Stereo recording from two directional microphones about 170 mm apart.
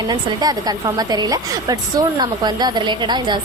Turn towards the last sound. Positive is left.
turn(degrees=-25)  # may be behind; listen again after turning